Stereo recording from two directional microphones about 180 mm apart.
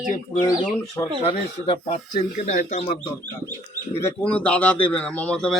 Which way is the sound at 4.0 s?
10° left (ahead or behind).